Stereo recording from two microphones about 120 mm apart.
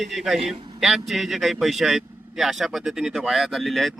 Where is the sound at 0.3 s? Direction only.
60° right (ahead or behind).